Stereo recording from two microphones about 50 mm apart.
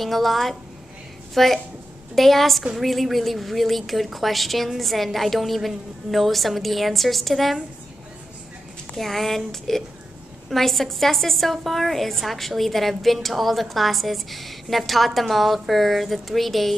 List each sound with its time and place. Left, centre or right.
0.0 s a woman's voice: centre
8.9 s a woman's voice: centre